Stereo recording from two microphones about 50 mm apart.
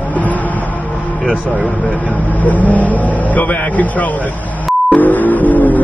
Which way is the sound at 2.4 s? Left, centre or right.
Left.